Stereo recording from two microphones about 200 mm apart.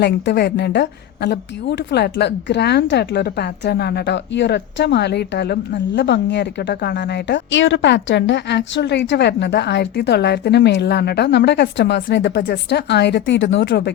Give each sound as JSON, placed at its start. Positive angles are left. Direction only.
{"t": 0.0, "sound": "a woman's voice", "side_deg": 55}